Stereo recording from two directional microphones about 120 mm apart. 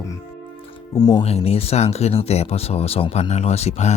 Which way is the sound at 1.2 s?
60° left (ahead or behind).